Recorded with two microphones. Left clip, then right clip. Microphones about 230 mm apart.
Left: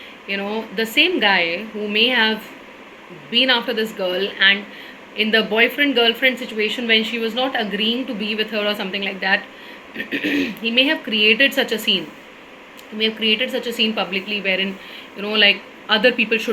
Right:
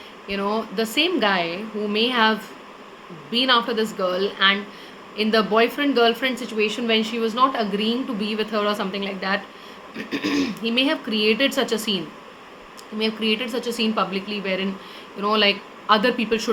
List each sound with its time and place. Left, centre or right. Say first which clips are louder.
0.3 s a woman's voice: even; centre
3.3 s a woman's voice: left 2 dB; centre